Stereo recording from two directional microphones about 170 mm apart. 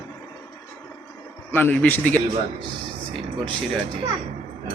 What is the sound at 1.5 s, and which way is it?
Speech, 10° left (ahead or behind).